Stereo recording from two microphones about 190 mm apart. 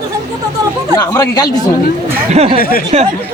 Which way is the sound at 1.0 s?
20° left (ahead or behind).